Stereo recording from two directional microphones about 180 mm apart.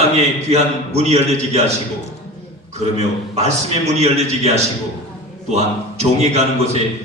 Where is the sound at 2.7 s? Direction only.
35° right (ahead or behind).